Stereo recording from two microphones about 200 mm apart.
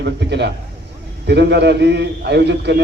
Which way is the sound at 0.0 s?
55° right (ahead or behind).